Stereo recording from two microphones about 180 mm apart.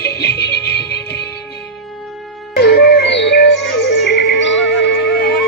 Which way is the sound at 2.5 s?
65° left (ahead or behind).